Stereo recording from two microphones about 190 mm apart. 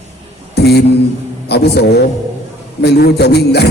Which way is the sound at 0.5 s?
60° left (ahead or behind).